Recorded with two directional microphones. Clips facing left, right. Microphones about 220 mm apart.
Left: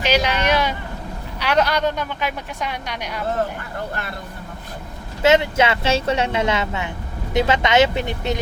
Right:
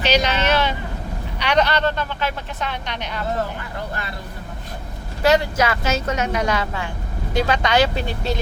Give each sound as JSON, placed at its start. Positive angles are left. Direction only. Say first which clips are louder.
{"t": 0.0, "sound": "vehicle", "louder": "even", "side_deg": 10}
{"t": 1.4, "sound": "speech", "louder": "even", "side_deg": 5}
{"t": 5.2, "sound": "a woman's voice", "louder": "left 2 dB", "side_deg": 20}